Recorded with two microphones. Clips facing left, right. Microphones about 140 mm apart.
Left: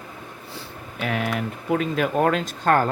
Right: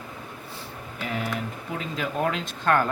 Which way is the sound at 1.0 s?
70° left (ahead or behind).